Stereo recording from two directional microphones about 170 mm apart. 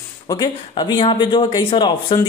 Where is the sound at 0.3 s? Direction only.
25° left (ahead or behind).